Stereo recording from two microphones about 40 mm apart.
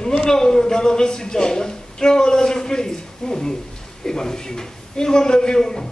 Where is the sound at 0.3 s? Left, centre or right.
Centre.